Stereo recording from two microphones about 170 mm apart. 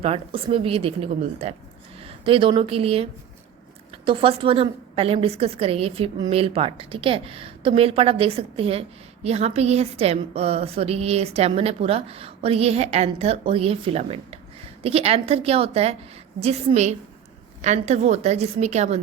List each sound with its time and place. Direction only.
0.0 s a woman's voice: 35° right (ahead or behind)